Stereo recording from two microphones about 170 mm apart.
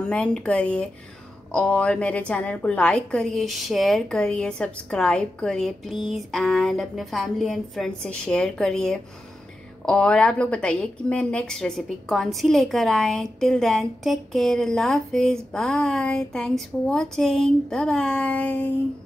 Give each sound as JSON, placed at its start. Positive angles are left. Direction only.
{"t": 0.0, "sound": "a woman's voice", "side_deg": 5}